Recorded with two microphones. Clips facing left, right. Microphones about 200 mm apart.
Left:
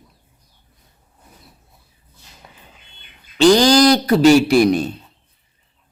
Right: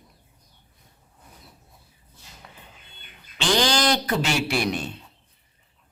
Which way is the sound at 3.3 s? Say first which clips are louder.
Left 12 dB; 40° left (ahead or behind).